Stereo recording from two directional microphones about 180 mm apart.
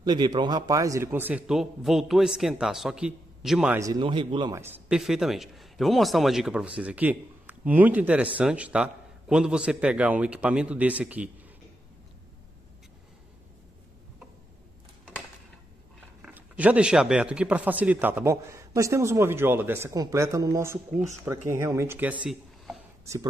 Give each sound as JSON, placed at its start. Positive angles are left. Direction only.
{"t": 0.0, "sound": "a man's voice", "side_deg": -25}
{"t": 3.8, "sound": "speech", "side_deg": -25}
{"t": 4.6, "sound": "a man's voice", "side_deg": -10}
{"t": 16.2, "sound": "speech", "side_deg": -10}